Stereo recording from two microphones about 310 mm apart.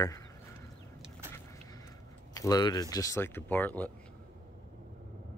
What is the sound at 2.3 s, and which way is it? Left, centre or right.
Speech, centre.